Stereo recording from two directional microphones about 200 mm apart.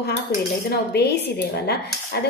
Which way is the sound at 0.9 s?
55° left (ahead or behind).